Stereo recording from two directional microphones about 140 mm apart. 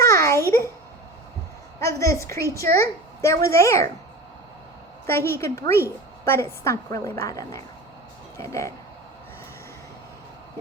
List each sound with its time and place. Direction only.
0.0 s a sound: 20° left (ahead or behind)
1.8 s a woman's voice: 20° left (ahead or behind)
5.0 s a woman's voice: 20° left (ahead or behind)